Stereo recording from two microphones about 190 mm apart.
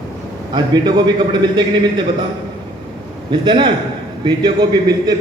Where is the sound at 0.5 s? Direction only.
20° right (ahead or behind).